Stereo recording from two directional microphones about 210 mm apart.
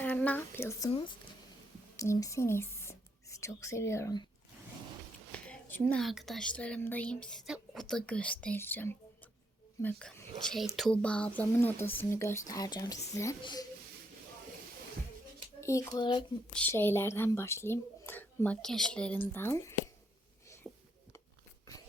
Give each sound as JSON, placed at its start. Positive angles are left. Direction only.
{"t": 0.0, "sound": "speech", "side_deg": 5}
{"t": 0.9, "sound": "speech", "side_deg": 25}
{"t": 5.3, "sound": "a woman's voice", "side_deg": 10}
{"t": 15.6, "sound": "speech", "side_deg": 15}
{"t": 16.5, "sound": "speech", "side_deg": 5}
{"t": 20.7, "sound": "a sound", "side_deg": 0}